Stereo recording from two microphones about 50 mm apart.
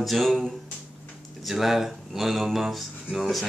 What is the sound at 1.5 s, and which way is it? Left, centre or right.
Speech, centre.